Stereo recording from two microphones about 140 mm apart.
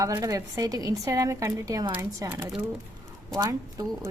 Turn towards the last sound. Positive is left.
turn(degrees=-25)  # may be behind; listen again after turning